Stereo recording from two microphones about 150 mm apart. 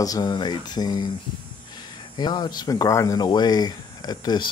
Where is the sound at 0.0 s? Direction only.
25° left (ahead or behind).